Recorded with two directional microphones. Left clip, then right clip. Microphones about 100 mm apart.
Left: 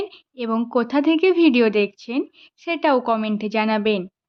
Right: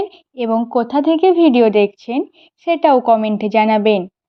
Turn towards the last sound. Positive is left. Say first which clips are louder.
# right 8 dB
turn(degrees=-30)  # may be behind; listen again after turning